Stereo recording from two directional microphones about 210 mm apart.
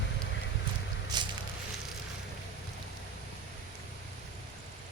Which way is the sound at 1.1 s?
20° right (ahead or behind).